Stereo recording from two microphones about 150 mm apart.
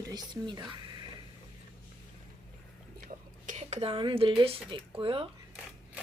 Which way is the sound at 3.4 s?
50° right (ahead or behind).